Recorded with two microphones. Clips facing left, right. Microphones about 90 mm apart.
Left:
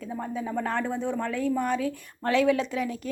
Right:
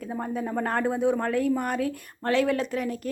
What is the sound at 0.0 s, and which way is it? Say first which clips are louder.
Speech: right 2 dB; 55° right (ahead or behind).